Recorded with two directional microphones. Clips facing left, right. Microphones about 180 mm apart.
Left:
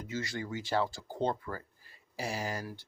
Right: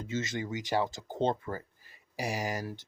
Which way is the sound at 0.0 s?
25° right (ahead or behind).